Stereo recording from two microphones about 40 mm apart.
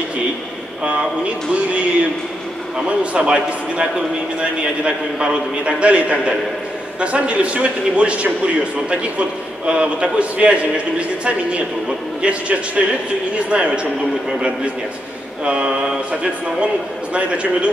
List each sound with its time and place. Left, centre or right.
0.8 s a man's voice: right
2.9 s a man's voice: right
9.7 s a man's voice: right
15.4 s a man's voice: right
17.1 s a man's voice: right